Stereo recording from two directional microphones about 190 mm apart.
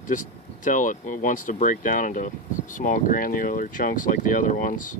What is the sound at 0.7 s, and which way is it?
Speech, 45° left (ahead or behind).